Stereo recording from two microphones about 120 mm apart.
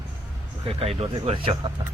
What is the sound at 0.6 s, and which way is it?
Speech, 55° right (ahead or behind).